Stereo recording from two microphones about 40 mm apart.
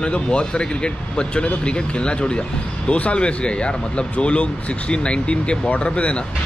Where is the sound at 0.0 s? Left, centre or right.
Left.